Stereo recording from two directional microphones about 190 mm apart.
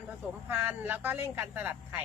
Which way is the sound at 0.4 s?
10° right (ahead or behind).